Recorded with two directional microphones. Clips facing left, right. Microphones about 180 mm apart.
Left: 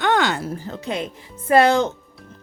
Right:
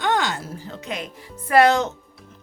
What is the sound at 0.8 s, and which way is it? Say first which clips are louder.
Speech: left 4 dB; 30° left (ahead or behind).